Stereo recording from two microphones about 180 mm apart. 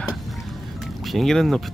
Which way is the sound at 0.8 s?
Centre (ahead or behind).